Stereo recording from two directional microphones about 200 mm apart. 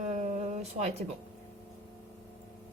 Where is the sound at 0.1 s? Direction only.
35° right (ahead or behind).